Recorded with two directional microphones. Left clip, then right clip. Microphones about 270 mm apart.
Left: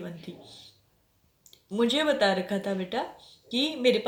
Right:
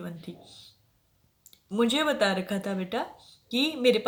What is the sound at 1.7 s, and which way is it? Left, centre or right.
A woman's voice, right.